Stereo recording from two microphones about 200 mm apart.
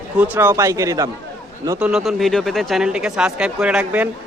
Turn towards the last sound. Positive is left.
turn(degrees=-5)  # may be behind; listen again after turning